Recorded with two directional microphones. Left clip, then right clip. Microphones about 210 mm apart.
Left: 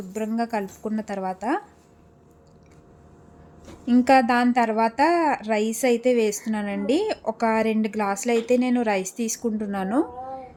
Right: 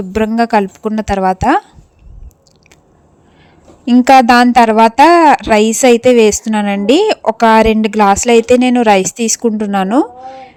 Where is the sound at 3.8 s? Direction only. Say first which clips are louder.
Right 12 dB; 40° right (ahead or behind).